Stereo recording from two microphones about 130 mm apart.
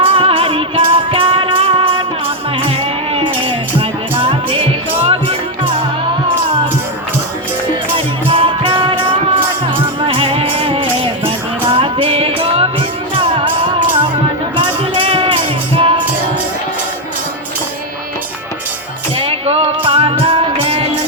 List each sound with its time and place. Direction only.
0.0 s music: 45° right (ahead or behind)
7.9 s music: 40° right (ahead or behind)
19.1 s music: 50° right (ahead or behind)